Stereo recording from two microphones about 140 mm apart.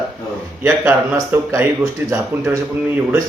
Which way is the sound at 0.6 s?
15° right (ahead or behind).